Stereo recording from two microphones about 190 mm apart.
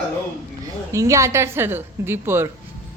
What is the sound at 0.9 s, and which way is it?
A woman's voice, 15° right (ahead or behind).